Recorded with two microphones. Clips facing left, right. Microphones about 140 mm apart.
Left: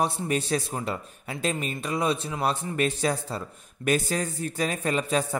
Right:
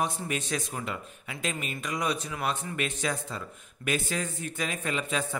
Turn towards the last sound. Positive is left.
turn(degrees=40)  # may be behind; listen again after turning